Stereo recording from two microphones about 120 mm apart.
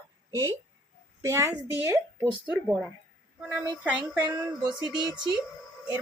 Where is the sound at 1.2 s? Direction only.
25° right (ahead or behind).